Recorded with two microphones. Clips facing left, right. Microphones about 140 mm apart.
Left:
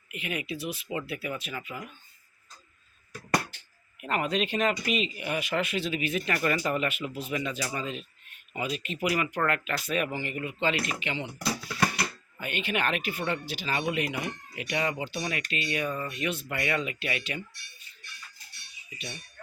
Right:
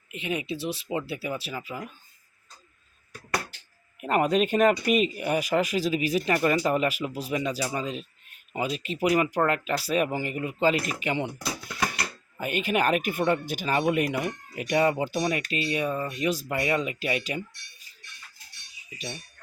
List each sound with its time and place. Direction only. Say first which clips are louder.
0.1 s speech: right 4 dB; 30° right (ahead or behind)
4.0 s speech: right 6 dB; 40° right (ahead or behind)
11.0 s speech: right 6 dB; 50° right (ahead or behind)
12.4 s speech: right 5 dB; 40° right (ahead or behind)